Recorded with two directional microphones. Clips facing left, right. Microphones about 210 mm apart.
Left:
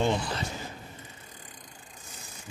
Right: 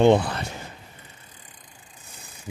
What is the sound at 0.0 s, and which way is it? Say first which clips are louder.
Speech: right 10 dB; 60° right (ahead or behind).